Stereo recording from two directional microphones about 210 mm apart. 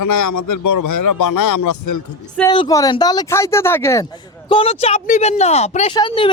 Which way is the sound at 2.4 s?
20° left (ahead or behind).